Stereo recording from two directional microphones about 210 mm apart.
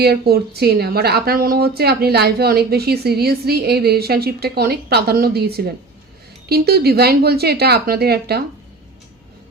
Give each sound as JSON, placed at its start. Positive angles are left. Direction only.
{"t": 0.0, "sound": "speech", "side_deg": -50}